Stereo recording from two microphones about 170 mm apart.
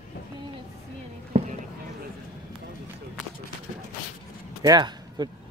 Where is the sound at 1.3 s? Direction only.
35° right (ahead or behind).